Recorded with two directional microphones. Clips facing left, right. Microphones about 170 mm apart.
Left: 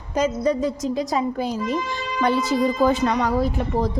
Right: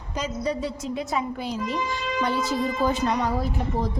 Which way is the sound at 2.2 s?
85° left.